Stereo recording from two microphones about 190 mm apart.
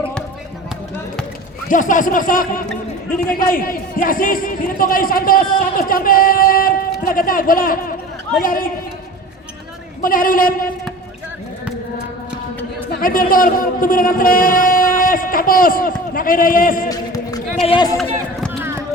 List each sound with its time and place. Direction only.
1.7 s a man's voice: 45° left (ahead or behind)
10.0 s a man's voice: 45° left (ahead or behind)
13.0 s speech: 50° left (ahead or behind)
16.9 s a sound: 20° left (ahead or behind)
17.7 s speech: 25° left (ahead or behind)